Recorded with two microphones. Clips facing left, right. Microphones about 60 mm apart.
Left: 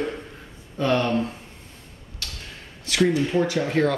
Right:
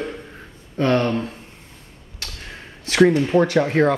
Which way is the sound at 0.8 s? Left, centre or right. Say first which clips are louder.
Right 3 dB; right.